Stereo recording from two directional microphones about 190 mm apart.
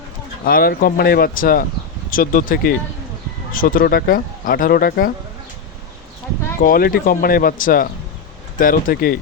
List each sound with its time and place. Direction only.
0.4 s speech: 50° left (ahead or behind)
6.6 s speech: 50° left (ahead or behind)